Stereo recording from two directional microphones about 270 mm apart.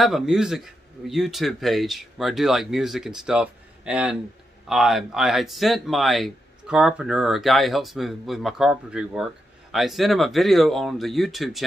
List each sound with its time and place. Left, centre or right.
0.0 s speech: centre